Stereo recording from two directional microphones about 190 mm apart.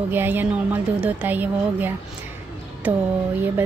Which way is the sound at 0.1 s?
10° right (ahead or behind).